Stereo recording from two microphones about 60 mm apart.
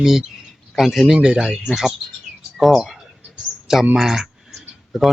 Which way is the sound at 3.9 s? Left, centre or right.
Centre.